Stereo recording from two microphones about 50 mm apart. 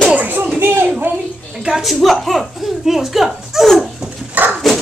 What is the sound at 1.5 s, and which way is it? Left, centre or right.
Speech, centre.